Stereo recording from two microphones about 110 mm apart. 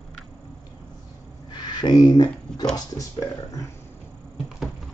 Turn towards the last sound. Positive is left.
turn(degrees=30)  # may be behind; listen again after turning